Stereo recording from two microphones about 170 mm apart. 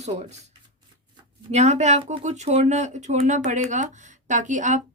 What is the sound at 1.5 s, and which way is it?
Speech, 40° right (ahead or behind).